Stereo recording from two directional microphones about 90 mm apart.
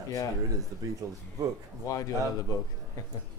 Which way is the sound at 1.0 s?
40° right (ahead or behind).